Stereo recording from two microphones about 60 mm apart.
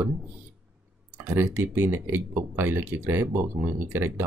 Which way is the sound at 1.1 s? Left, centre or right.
Right.